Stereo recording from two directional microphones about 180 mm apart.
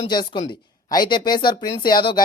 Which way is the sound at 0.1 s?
25° left (ahead or behind).